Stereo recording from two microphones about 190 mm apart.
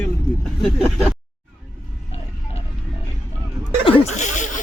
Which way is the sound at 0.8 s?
Centre (ahead or behind).